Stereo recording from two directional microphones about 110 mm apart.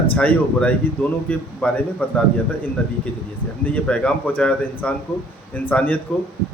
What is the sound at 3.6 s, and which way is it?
A man's voice, 10° left (ahead or behind).